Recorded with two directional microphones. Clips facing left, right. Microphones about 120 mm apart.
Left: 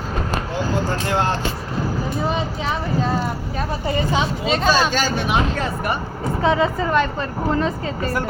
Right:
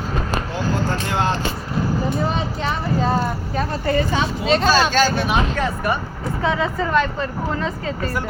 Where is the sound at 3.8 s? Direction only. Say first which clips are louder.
Even; 15° left (ahead or behind).